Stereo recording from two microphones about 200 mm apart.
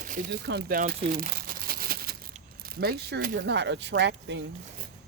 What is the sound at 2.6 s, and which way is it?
Speech, 50° right (ahead or behind).